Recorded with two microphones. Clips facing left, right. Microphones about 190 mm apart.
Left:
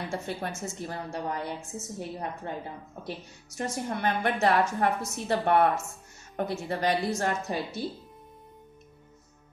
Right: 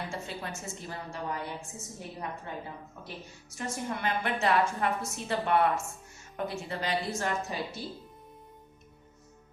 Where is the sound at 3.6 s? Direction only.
50° left (ahead or behind).